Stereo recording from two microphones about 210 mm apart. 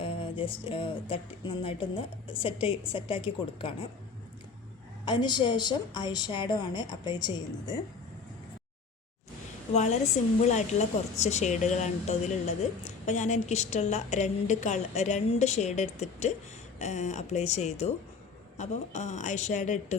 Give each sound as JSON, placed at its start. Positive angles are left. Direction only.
{"t": 0.0, "sound": "a sound", "side_deg": 25}
{"t": 1.6, "sound": "a woman's voice", "side_deg": 25}
{"t": 5.0, "sound": "a woman's voice", "side_deg": 20}
{"t": 9.7, "sound": "speech", "side_deg": 30}